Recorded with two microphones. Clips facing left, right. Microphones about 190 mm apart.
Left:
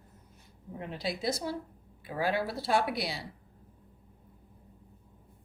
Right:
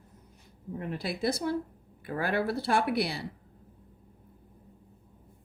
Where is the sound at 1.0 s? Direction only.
60° right (ahead or behind).